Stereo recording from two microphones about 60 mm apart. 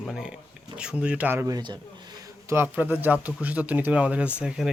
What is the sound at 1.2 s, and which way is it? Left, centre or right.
Speech, right.